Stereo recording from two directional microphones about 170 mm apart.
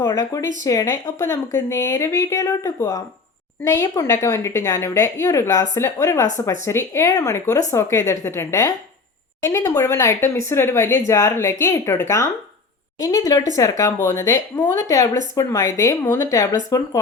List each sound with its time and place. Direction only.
0.0 s a woman's voice: 20° left (ahead or behind)